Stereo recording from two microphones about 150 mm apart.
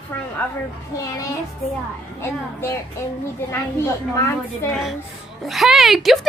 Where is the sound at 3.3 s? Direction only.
15° left (ahead or behind).